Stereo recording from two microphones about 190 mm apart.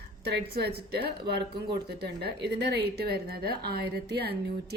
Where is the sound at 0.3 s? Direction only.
60° right (ahead or behind).